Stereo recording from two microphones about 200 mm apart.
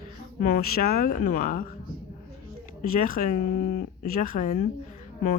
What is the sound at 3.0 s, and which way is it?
Speech, 45° left (ahead or behind).